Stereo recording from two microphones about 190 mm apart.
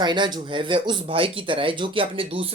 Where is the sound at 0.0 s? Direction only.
25° right (ahead or behind).